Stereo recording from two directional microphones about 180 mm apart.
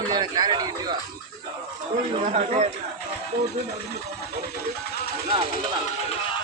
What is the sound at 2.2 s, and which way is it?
Speech, 40° right (ahead or behind).